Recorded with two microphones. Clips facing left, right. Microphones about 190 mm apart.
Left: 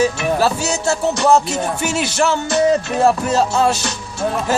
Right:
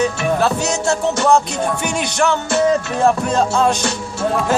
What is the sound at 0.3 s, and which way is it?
Music, 5° left (ahead or behind).